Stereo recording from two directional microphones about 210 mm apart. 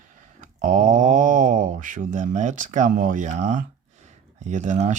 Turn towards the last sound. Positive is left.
turn(degrees=-35)  # may be behind; listen again after turning